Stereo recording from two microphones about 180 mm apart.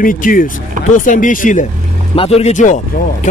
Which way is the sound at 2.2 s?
35° left (ahead or behind).